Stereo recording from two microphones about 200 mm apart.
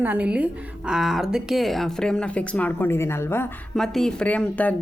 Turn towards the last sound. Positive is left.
turn(degrees=5)  # may be behind; listen again after turning